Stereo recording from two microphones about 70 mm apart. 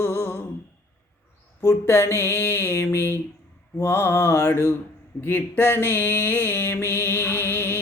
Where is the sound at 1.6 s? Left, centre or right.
Left.